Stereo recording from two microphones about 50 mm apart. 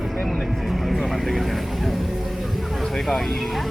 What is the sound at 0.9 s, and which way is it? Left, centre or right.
Speech, centre.